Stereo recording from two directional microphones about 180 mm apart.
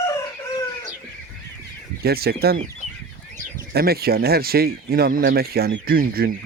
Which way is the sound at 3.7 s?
60° right (ahead or behind).